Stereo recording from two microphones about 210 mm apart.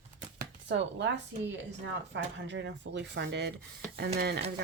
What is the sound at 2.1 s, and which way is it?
Speech, 60° right (ahead or behind).